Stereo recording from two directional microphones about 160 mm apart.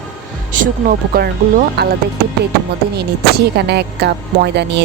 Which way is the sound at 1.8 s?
90° right.